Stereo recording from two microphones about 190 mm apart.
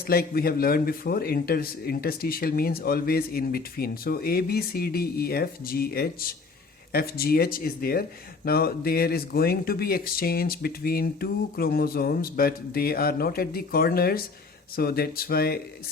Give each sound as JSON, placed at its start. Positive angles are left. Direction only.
{"t": 0.1, "sound": "a man's voice", "side_deg": 50}